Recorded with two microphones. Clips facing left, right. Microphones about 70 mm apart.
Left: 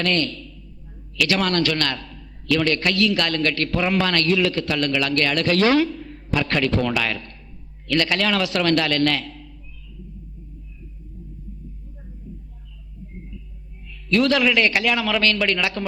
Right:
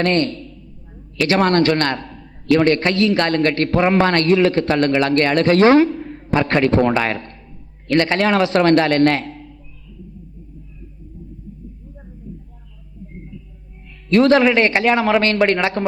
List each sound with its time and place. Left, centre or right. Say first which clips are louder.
0.0 s a man's voice: right 5 dB; right
14.1 s a man's voice: right 6 dB; right